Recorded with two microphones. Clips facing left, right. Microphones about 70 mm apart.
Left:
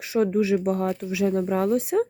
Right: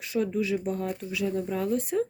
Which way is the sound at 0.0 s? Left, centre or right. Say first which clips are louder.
Left 6 dB; left.